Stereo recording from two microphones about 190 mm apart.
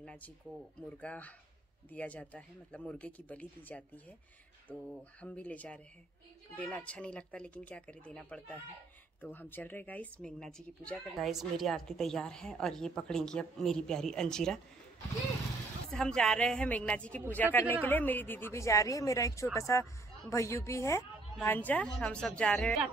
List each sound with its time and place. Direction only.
0.0 s a sound: 5° left (ahead or behind)
1.0 s a woman's voice: 5° left (ahead or behind)
15.9 s a woman's voice: 5° left (ahead or behind)